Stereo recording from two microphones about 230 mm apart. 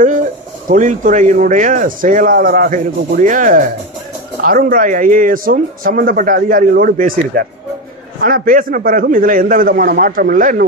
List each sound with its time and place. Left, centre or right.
0.0 s speech: right